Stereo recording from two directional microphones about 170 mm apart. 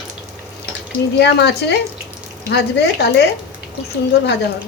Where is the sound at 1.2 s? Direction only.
80° left.